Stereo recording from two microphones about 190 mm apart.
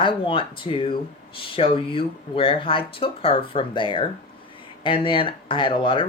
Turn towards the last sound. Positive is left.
turn(degrees=25)  # may be behind; listen again after turning